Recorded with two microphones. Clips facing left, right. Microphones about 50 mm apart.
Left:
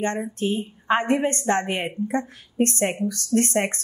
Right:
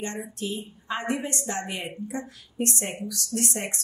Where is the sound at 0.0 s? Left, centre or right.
Left.